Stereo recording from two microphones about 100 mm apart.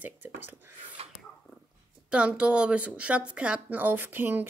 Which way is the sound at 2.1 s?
10° right (ahead or behind).